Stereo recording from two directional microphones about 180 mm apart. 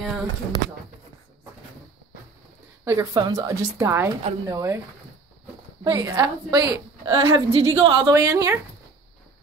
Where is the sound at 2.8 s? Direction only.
15° right (ahead or behind).